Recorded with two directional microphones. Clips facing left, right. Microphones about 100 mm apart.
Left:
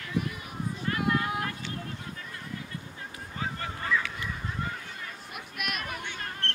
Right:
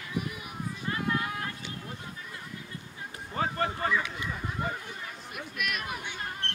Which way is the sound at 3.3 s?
50° right (ahead or behind).